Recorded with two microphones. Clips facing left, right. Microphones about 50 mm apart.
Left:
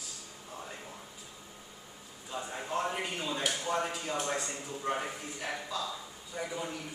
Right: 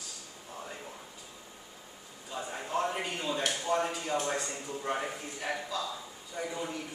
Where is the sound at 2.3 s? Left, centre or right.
Centre.